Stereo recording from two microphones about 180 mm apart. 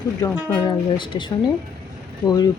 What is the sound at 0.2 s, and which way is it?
Speech, 15° left (ahead or behind).